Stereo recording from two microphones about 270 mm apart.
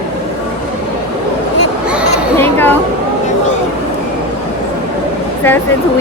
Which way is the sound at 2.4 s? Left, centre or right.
Centre.